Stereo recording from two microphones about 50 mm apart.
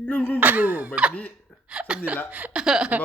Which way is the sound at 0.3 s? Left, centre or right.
Right.